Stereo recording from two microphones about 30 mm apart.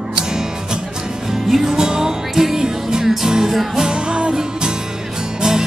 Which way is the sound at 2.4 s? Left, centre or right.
Centre.